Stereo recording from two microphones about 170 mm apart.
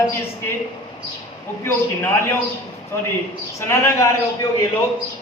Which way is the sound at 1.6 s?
15° left (ahead or behind).